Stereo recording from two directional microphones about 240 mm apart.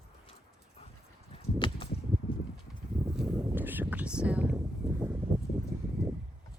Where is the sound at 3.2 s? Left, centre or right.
Centre.